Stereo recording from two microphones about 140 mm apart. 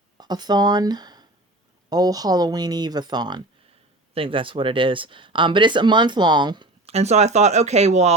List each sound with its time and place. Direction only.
0.2 s speech: 30° right (ahead or behind)
6.8 s speech: 50° right (ahead or behind)